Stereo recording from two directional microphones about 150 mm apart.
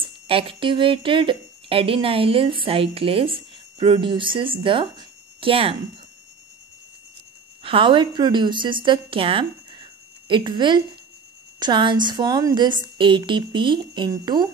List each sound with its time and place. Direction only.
0.0 s speech: 35° right (ahead or behind)
7.6 s a woman's voice: 35° right (ahead or behind)